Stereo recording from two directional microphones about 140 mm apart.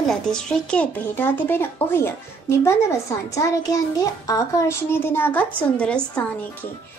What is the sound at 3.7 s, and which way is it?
A child's voice, 25° left (ahead or behind).